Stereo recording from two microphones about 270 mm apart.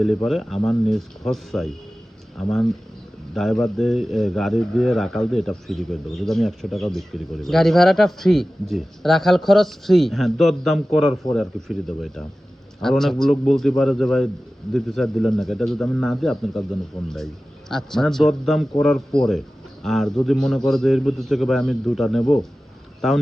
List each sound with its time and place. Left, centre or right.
0.0 s speech: centre
13.3 s a man's voice: left
13.6 s speech: centre
22.2 s speech: centre
23.0 s speech: centre